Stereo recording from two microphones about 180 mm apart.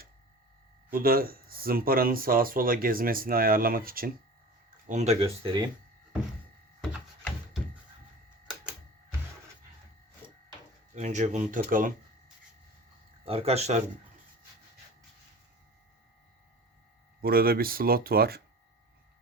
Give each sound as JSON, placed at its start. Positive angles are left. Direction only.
{"t": 0.9, "sound": "speech", "side_deg": -55}
{"t": 4.9, "sound": "speech", "side_deg": -40}
{"t": 8.4, "sound": "printer", "side_deg": -5}
{"t": 10.9, "sound": "speech", "side_deg": -40}
{"t": 13.2, "sound": "speech", "side_deg": -35}
{"t": 17.2, "sound": "speech", "side_deg": -55}